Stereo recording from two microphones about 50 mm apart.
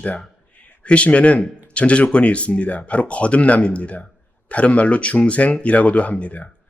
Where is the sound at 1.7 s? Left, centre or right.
Left.